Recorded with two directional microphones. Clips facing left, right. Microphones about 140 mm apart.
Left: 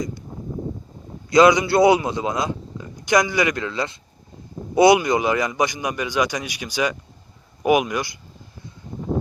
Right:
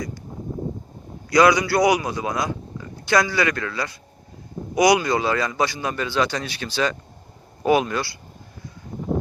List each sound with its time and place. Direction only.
1.3 s a man's voice: 20° left (ahead or behind)